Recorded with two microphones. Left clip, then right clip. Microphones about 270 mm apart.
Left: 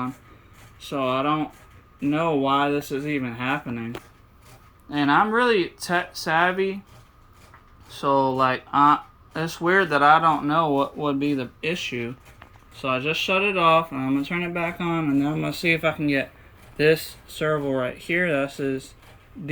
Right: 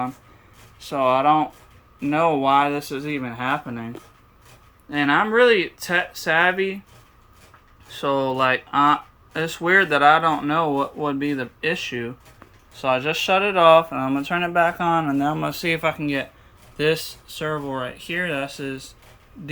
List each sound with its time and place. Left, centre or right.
0.9 s speech: centre
3.2 s speech: right
4.9 s speech: centre
7.9 s speech: centre
17.3 s speech: centre